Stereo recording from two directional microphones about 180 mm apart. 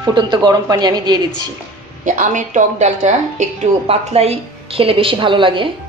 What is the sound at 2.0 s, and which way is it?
A woman's voice, 45° right (ahead or behind).